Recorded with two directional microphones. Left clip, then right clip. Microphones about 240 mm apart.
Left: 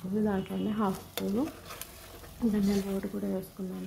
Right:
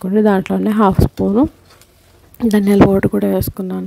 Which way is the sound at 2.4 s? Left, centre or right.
Right.